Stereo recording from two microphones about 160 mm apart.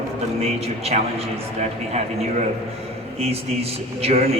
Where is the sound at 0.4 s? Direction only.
40° right (ahead or behind).